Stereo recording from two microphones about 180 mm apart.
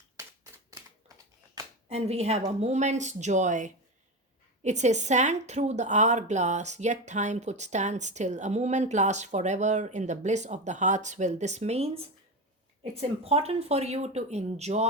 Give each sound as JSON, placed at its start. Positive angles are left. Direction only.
{"t": 1.9, "sound": "speech", "side_deg": -35}